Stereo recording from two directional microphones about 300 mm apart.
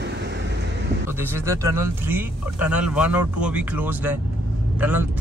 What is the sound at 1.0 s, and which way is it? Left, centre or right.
Speech, centre.